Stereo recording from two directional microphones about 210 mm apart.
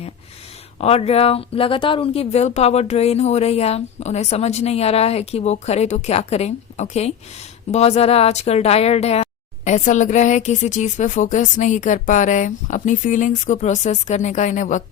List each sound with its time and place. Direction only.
0.8 s speech: 30° left (ahead or behind)